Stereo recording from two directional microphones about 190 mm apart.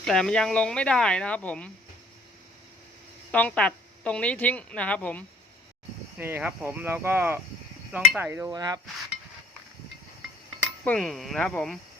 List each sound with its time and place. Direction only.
0.0 s speech: 5° left (ahead or behind)
3.3 s a woman's voice: 5° left (ahead or behind)
6.1 s speech: 10° right (ahead or behind)
10.8 s speech: 5° left (ahead or behind)